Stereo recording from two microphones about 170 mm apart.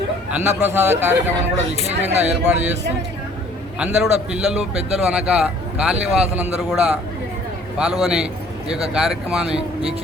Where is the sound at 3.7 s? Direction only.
5° right (ahead or behind).